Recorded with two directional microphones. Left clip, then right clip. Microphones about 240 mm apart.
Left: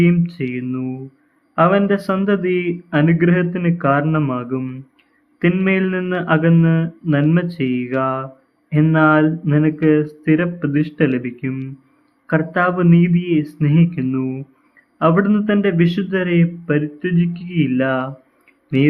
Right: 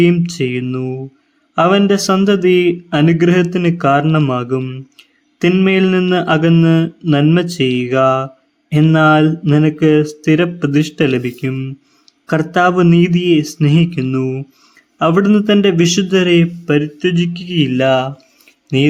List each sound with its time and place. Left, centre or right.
0.0 s speech: right